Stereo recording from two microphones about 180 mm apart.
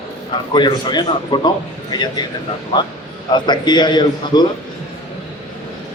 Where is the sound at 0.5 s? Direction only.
25° left (ahead or behind).